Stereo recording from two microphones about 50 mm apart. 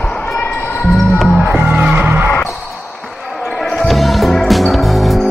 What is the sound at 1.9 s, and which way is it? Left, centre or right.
Music, right.